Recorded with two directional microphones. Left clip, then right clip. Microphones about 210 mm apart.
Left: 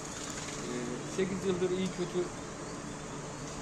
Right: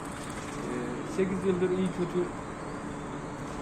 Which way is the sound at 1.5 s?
5° right (ahead or behind).